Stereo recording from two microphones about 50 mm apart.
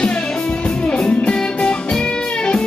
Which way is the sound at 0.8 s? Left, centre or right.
Left.